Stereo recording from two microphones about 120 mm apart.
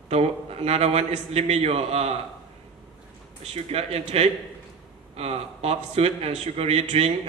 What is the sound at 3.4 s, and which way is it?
Speech, 60° right (ahead or behind).